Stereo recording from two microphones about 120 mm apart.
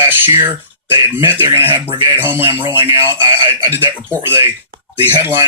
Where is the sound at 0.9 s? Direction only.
20° right (ahead or behind).